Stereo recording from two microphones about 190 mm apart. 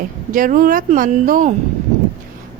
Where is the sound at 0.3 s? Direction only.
45° right (ahead or behind).